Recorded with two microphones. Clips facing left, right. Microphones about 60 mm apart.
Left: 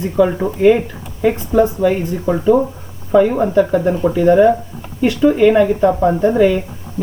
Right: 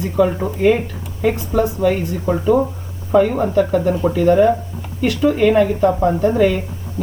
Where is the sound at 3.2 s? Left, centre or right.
Centre.